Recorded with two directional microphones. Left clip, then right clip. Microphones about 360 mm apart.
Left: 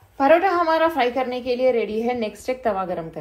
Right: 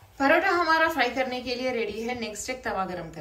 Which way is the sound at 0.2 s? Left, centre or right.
Centre.